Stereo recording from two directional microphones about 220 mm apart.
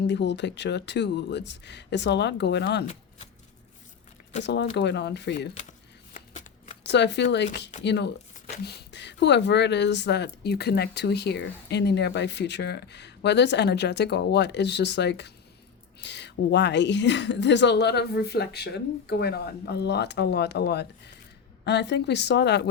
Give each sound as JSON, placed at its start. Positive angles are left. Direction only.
{"t": 0.1, "sound": "speech", "side_deg": 50}
{"t": 4.4, "sound": "speech", "side_deg": 50}
{"t": 6.1, "sound": "shuffling cards", "side_deg": 30}
{"t": 6.8, "sound": "speech", "side_deg": 50}